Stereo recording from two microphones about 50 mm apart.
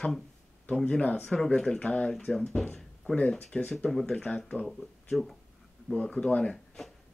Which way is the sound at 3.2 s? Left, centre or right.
Left.